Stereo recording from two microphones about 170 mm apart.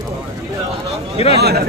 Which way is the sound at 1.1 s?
35° left (ahead or behind).